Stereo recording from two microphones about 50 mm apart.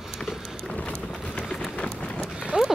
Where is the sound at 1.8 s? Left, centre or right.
Left.